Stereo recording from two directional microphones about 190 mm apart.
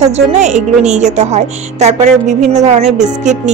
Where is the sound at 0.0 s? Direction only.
35° right (ahead or behind).